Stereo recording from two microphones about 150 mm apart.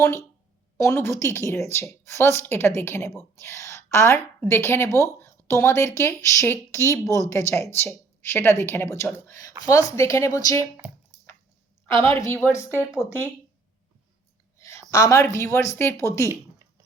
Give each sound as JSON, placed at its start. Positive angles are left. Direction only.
{"t": 0.0, "sound": "speech", "side_deg": 20}
{"t": 12.1, "sound": "speech", "side_deg": 15}
{"t": 14.6, "sound": "a woman's voice", "side_deg": 20}